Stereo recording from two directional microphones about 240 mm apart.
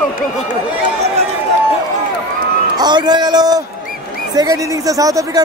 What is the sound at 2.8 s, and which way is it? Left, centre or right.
Speech, centre.